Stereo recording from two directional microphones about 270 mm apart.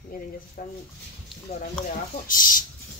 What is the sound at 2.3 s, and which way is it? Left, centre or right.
Speech, left.